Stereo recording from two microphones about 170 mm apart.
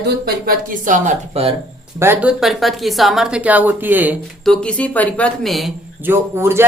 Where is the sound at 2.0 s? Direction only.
15° right (ahead or behind).